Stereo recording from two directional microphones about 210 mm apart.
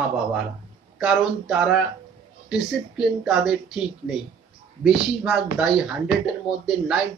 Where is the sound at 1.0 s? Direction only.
Centre (ahead or behind).